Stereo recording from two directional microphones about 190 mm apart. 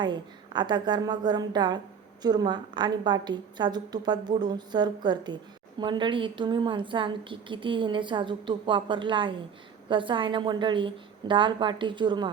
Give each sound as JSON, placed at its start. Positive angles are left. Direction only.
{"t": 0.0, "sound": "a woman's voice", "side_deg": -25}